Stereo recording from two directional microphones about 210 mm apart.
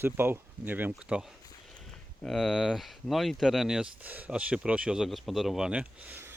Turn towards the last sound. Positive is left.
turn(degrees=-10)  # may be behind; listen again after turning